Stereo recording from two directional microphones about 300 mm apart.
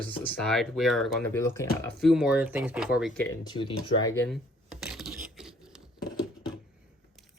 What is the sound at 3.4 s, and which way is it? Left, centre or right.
Speech, centre.